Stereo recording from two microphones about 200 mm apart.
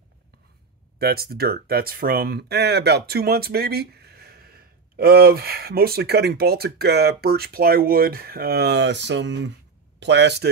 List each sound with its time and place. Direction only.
0.9 s speech: 50° right (ahead or behind)